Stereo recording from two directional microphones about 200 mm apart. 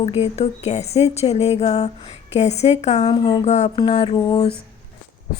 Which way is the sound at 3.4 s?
35° left (ahead or behind).